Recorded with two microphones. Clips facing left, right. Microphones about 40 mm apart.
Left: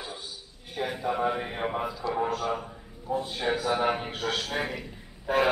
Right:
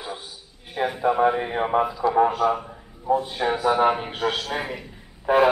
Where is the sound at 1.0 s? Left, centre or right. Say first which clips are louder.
Right 9 dB; centre.